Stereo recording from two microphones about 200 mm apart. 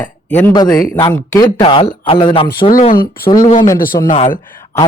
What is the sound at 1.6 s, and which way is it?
A man's voice, 30° left (ahead or behind).